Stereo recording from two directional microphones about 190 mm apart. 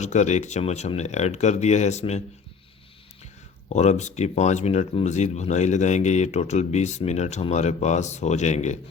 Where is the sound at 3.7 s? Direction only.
35° left (ahead or behind).